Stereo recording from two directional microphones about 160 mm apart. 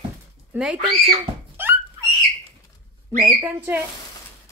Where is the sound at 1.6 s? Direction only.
15° right (ahead or behind).